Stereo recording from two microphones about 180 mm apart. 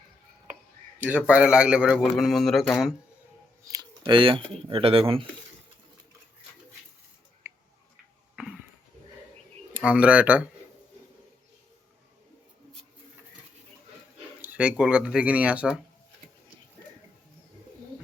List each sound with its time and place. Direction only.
0.9 s a man's voice: 10° right (ahead or behind)
3.7 s speech: 25° right (ahead or behind)
7.4 s tick-tock: 15° right (ahead or behind)
9.7 s speech: 5° right (ahead or behind)
14.4 s speech: 10° right (ahead or behind)